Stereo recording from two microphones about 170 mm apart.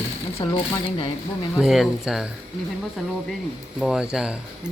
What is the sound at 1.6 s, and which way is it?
Speech, centre (ahead or behind).